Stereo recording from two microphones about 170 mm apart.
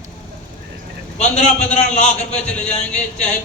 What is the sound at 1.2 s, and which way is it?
A man's voice, 40° left (ahead or behind).